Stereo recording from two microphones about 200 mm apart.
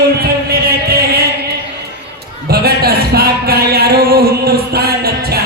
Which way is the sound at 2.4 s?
50° right (ahead or behind).